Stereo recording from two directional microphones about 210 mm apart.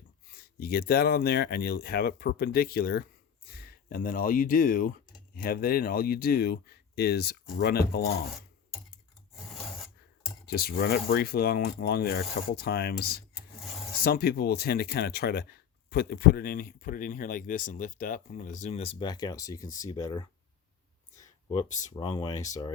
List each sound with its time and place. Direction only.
0.3 s speech: 45° left (ahead or behind)
10.4 s speech: 45° left (ahead or behind); by 20.2 s 20° left (ahead or behind)
21.5 s speech: 30° left (ahead or behind)
21.9 s speech: 20° left (ahead or behind)